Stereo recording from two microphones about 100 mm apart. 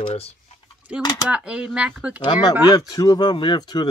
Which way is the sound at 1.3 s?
10° right (ahead or behind).